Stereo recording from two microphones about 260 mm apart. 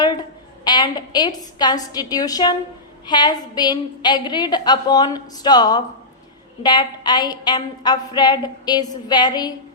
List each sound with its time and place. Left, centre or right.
0.0 s a woman's voice: centre